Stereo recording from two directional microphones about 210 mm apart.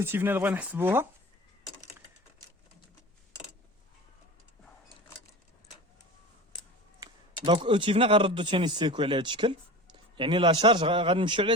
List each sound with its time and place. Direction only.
0.0 s speech: 10° right (ahead or behind)
7.0 s speech: 25° right (ahead or behind)